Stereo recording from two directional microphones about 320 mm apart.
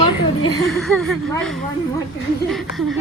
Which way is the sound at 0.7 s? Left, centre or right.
Centre.